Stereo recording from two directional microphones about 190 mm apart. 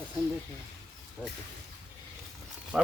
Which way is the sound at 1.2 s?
5° right (ahead or behind).